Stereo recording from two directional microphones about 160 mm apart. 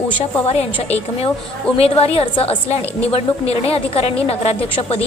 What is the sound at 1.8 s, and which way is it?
A woman's voice, 40° left (ahead or behind).